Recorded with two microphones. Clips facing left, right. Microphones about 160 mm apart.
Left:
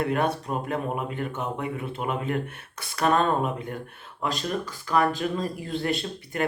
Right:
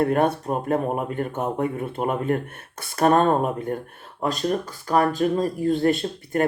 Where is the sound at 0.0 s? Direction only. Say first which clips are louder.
Right 5 dB; 50° right (ahead or behind).